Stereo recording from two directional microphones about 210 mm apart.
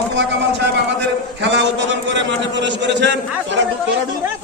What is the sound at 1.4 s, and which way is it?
A man's voice, 55° right (ahead or behind).